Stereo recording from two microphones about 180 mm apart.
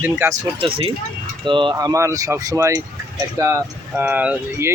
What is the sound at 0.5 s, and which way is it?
Speech, 30° right (ahead or behind).